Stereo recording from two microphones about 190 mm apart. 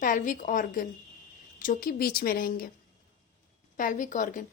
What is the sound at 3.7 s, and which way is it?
Speech, 45° left (ahead or behind).